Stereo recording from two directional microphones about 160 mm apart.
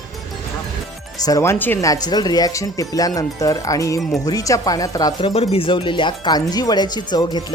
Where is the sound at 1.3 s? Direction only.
20° left (ahead or behind).